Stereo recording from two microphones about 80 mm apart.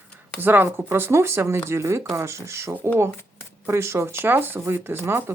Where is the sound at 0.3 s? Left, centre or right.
Right.